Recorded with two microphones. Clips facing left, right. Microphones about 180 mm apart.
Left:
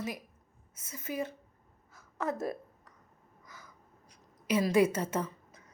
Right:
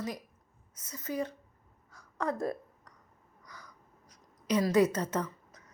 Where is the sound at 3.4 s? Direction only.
25° left (ahead or behind).